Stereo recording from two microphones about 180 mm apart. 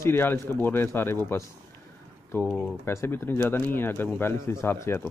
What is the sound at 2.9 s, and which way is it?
A man's voice, 15° left (ahead or behind).